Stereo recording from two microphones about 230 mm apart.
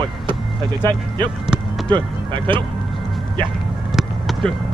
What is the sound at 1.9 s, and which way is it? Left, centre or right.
Speech, right.